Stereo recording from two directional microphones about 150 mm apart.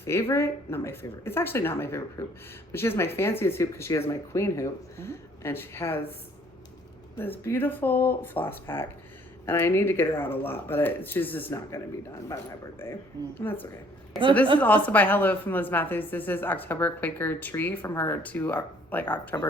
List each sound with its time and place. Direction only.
0.0 s speech: 15° left (ahead or behind)
7.2 s speech: 15° left (ahead or behind)
13.4 s speech: 15° left (ahead or behind)